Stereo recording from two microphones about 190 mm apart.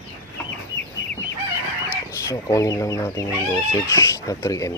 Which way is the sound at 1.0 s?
65° left (ahead or behind).